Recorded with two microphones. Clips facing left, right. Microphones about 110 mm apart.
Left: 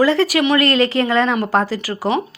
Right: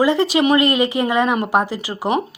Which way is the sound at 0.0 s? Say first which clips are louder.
Left 1 dB; 20° right (ahead or behind).